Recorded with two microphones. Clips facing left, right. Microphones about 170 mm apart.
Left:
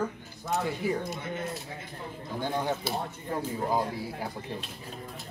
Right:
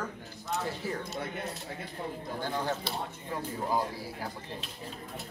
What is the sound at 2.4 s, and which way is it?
Speech, 15° left (ahead or behind).